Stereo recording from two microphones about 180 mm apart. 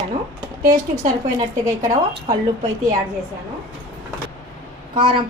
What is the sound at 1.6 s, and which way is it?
Speech, 20° right (ahead or behind).